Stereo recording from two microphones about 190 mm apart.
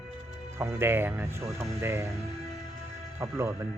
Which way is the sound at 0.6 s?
10° right (ahead or behind).